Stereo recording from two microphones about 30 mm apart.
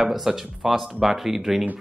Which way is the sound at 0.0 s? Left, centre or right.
Centre.